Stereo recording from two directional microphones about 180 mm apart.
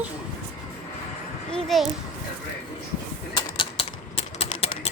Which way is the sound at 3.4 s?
30° left (ahead or behind).